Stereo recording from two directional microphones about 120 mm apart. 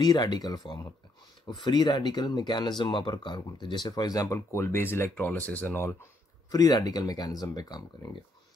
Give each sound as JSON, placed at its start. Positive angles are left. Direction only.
{"t": 0.0, "sound": "speech", "side_deg": 35}
{"t": 6.5, "sound": "speech", "side_deg": 30}